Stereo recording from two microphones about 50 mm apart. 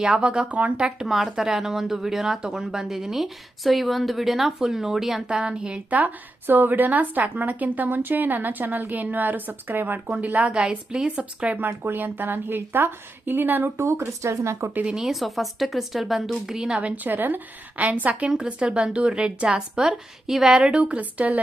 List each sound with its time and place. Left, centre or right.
0.0 s speech: centre
0.9 s a woman's voice: centre; by 10.5 s right
10.5 s speech: centre
11.8 s a woman's voice: right
13.7 s speech: right
14.8 s a woman's voice: centre
16.8 s a woman's voice: right
18.3 s speech: centre